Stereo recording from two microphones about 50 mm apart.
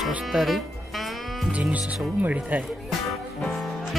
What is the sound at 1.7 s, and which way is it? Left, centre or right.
Speech, right.